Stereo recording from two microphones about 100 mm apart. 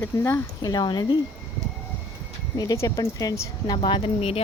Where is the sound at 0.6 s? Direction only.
45° left (ahead or behind).